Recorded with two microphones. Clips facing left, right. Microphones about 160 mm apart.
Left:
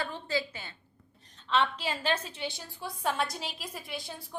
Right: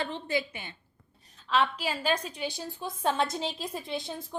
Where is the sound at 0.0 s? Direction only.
20° right (ahead or behind).